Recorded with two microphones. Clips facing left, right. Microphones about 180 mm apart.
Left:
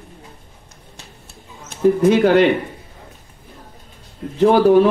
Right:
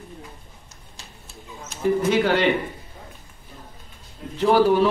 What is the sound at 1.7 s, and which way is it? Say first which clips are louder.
Speech: left 7 dB; 50° left (ahead or behind).